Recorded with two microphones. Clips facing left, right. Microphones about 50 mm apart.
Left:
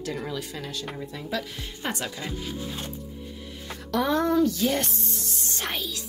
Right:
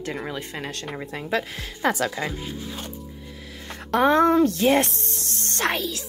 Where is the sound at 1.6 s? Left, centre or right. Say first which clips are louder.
Right 8 dB; right.